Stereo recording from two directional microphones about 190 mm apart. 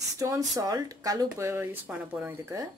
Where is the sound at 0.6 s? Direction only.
20° right (ahead or behind).